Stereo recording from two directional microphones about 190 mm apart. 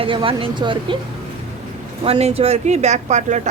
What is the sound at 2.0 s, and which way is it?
Speech, 30° right (ahead or behind).